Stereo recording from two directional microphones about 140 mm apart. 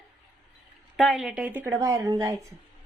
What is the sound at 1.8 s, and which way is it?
Speech, 25° right (ahead or behind).